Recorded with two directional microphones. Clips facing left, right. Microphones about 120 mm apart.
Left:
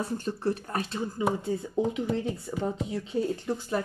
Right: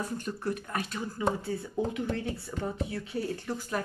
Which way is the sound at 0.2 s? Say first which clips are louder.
Left 4 dB; 30° left (ahead or behind).